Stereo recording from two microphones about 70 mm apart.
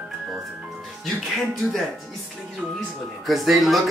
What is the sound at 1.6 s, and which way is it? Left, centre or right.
Speech, centre.